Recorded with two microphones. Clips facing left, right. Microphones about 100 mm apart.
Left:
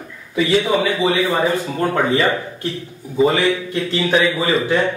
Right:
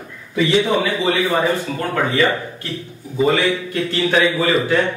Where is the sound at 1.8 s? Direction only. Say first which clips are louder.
Left 2 dB; 20° left (ahead or behind).